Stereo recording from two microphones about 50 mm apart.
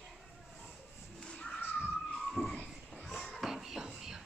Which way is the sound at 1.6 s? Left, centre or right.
Left.